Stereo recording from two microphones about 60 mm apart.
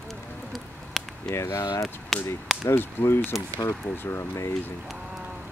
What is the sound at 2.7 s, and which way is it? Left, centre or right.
Speech, left.